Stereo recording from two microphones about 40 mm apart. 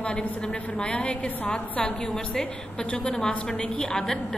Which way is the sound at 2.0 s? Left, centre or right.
Centre.